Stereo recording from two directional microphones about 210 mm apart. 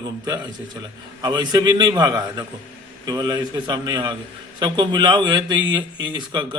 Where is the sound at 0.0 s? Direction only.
20° right (ahead or behind).